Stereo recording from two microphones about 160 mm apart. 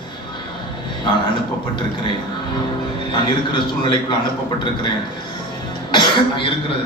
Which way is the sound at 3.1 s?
30° left (ahead or behind).